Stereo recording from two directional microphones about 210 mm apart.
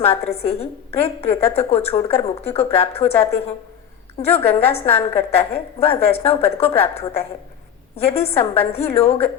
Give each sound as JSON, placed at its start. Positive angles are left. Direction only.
{"t": 0.0, "sound": "speech", "side_deg": 30}